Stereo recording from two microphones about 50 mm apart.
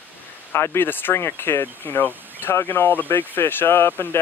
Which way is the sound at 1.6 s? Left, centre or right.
Left.